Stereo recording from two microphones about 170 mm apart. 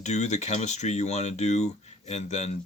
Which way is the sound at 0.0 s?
40° left (ahead or behind).